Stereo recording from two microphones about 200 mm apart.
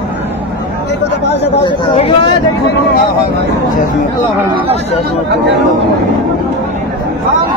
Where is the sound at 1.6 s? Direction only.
25° left (ahead or behind).